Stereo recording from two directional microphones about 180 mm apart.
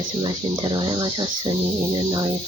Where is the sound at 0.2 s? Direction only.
25° right (ahead or behind).